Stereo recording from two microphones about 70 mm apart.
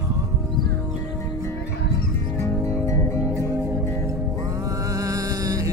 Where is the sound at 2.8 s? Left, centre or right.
Left.